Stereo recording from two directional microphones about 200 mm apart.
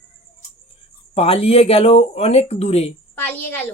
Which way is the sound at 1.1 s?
30° left (ahead or behind).